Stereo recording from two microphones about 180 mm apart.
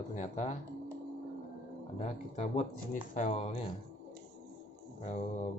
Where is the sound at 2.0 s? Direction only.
40° left (ahead or behind).